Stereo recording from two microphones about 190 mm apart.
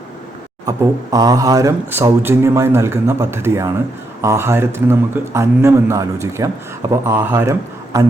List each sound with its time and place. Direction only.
1.1 s a man's voice: 20° right (ahead or behind)